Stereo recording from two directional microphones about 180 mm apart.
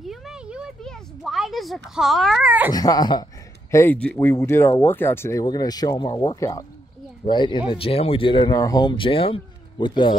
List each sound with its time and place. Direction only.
0.0 s a sound: centre (ahead or behind)
2.7 s speech: 20° left (ahead or behind)
3.7 s speech: 10° left (ahead or behind)